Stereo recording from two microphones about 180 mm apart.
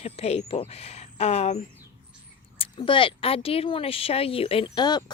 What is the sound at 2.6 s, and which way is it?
Speech, 30° left (ahead or behind).